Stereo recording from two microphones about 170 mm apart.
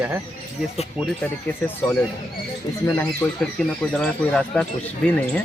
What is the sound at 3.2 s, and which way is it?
Speech, 10° left (ahead or behind).